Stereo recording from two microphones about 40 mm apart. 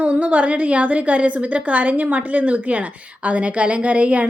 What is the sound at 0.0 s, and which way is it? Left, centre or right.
A woman's voice, right.